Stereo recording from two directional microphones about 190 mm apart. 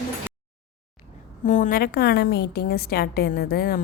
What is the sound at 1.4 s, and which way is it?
A woman's voice, 40° left (ahead or behind).